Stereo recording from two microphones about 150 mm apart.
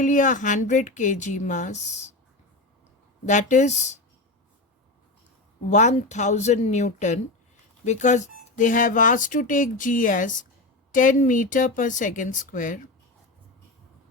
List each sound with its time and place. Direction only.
0.0 s speech: 60° left (ahead or behind)
3.2 s speech: 55° left (ahead or behind)
5.7 s speech: 50° left (ahead or behind)